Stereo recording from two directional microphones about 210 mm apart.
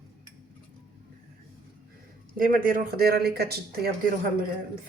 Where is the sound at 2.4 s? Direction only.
45° right (ahead or behind).